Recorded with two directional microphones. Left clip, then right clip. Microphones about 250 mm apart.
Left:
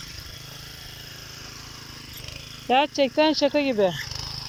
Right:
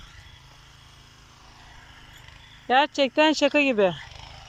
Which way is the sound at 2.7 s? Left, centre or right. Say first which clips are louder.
Even; centre.